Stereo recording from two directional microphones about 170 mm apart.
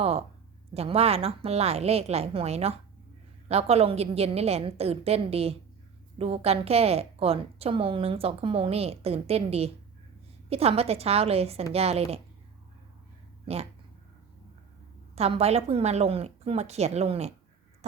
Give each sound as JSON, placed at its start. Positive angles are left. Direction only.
{"t": 0.0, "sound": "a woman's voice", "side_deg": -35}
{"t": 13.4, "sound": "speech", "side_deg": -35}
{"t": 15.1, "sound": "a woman's voice", "side_deg": -35}